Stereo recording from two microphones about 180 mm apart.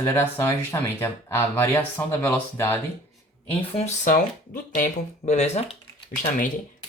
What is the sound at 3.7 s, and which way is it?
Speech, 35° left (ahead or behind).